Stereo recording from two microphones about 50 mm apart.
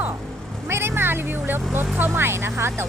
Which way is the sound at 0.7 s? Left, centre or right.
Right.